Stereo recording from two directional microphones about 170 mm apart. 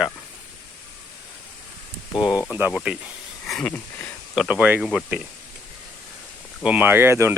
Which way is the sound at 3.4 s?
5° left (ahead or behind).